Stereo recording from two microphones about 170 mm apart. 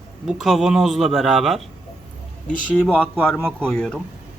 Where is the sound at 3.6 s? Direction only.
5° left (ahead or behind).